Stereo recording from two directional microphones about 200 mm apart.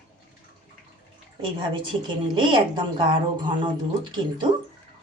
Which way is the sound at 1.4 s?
25° right (ahead or behind).